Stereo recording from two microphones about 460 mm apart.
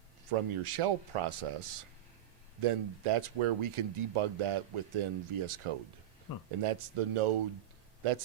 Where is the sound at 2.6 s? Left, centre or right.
Right.